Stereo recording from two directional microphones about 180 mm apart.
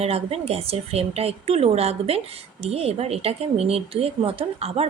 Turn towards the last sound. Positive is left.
turn(degrees=-35)  # may be behind; listen again after turning